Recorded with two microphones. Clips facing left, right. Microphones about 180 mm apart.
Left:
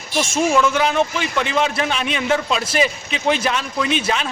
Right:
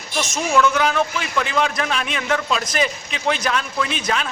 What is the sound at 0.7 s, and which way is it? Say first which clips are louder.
Speech: left 2 dB; 25° left (ahead or behind).